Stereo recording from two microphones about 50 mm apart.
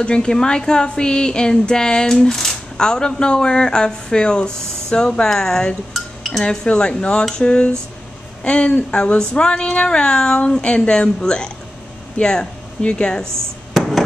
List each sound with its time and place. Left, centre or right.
0.0 s speech: centre
5.9 s dishes: centre
6.5 s speech: centre
13.7 s a sound: centre